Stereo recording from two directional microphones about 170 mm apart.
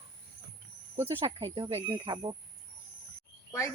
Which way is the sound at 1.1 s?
30° right (ahead or behind).